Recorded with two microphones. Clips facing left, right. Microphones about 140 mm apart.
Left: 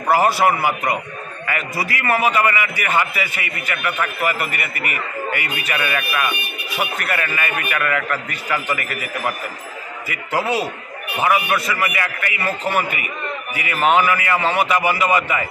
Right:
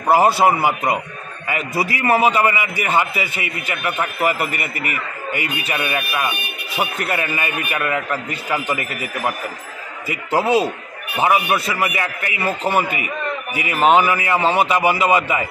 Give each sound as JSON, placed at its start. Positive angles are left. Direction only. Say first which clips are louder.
{"t": 0.1, "sound": "a man's voice", "louder": "right 2 dB", "side_deg": -25}